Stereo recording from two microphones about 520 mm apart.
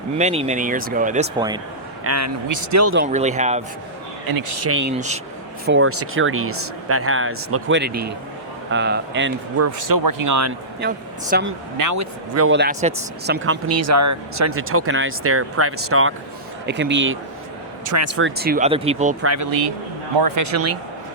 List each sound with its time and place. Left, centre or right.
0.2 s speech: centre
2.0 s speech: right; by 3.6 s centre
4.3 s a man's voice: right
4.6 s speech: right
4.9 s a man's voice: centre; by 10.5 s right
10.8 s speech: centre
11.8 s speech: right; by 19.1 s centre
19.2 s speech: right
19.5 s a man's voice: right